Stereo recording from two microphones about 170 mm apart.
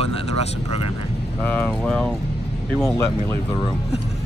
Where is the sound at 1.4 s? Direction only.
10° left (ahead or behind).